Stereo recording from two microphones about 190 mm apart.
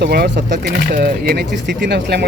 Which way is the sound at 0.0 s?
55° right (ahead or behind).